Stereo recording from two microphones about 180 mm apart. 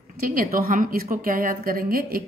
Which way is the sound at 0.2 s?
50° right (ahead or behind).